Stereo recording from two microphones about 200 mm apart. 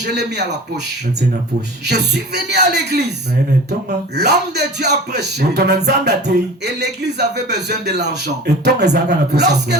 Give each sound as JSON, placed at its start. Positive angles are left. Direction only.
{"t": 0.0, "sound": "speech", "side_deg": -55}
{"t": 1.9, "sound": "speech", "side_deg": -55}